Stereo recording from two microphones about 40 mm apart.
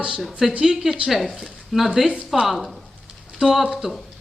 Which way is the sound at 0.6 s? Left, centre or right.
Centre.